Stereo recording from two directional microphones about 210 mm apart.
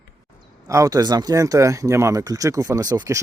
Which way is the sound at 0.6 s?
15° right (ahead or behind).